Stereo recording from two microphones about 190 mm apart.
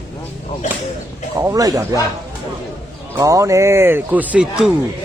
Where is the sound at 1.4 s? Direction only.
20° right (ahead or behind).